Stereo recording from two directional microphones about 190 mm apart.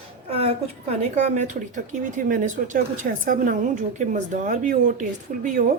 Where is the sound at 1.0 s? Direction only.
40° right (ahead or behind).